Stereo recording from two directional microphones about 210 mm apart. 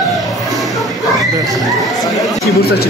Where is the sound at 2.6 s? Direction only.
50° left (ahead or behind).